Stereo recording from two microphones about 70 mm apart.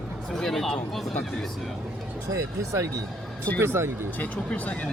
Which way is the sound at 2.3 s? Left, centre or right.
Right.